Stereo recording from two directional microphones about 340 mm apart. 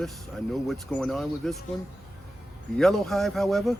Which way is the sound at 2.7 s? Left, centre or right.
Centre.